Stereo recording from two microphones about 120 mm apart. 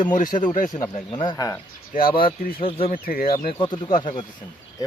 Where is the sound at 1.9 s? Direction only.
90° left.